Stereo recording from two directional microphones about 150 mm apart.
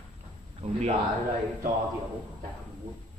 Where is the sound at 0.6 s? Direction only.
50° right (ahead or behind).